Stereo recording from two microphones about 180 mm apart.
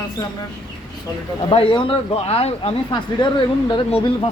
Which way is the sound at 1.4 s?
30° left (ahead or behind).